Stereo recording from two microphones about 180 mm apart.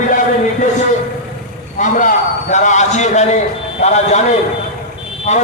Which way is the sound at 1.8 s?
45° left (ahead or behind).